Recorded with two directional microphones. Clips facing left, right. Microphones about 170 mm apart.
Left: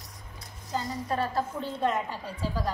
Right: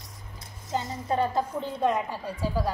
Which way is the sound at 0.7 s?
25° right (ahead or behind).